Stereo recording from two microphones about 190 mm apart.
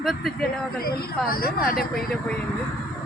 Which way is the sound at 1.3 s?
50° left (ahead or behind).